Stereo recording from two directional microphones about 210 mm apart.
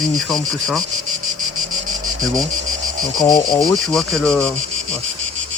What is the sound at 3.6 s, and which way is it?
Speech, centre (ahead or behind).